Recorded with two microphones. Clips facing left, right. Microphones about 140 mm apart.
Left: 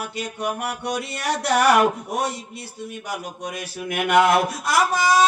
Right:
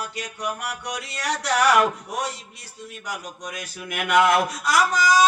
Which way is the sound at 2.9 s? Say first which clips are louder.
Left 1 dB; 25° left (ahead or behind).